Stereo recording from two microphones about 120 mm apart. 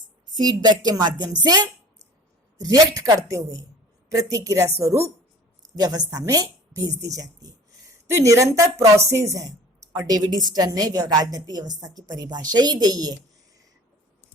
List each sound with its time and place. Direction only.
0.3 s a woman's voice: 35° right (ahead or behind)